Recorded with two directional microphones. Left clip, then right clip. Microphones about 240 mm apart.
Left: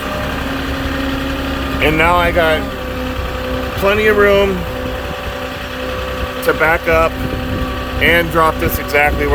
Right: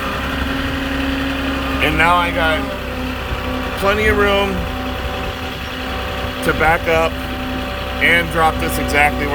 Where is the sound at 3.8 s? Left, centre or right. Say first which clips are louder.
Left 4 dB; centre.